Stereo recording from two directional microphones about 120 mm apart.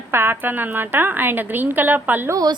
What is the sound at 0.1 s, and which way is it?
A woman's voice, 20° right (ahead or behind).